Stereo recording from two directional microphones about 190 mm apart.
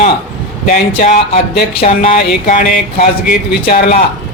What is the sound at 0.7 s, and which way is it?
Speech, 45° left (ahead or behind).